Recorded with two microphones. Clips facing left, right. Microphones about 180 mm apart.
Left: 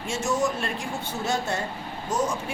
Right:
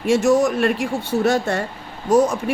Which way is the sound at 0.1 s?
65° right (ahead or behind).